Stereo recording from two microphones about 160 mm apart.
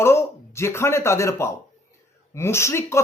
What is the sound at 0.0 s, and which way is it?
A man's voice, 15° left (ahead or behind).